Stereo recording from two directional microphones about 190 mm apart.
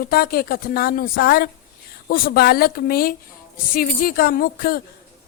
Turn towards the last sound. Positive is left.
turn(degrees=50)  # may be behind; listen again after turning